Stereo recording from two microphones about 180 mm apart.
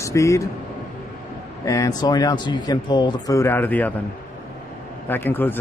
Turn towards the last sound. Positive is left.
turn(degrees=10)  # may be behind; listen again after turning